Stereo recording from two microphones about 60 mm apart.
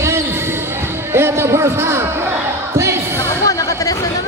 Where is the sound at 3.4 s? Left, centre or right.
Left.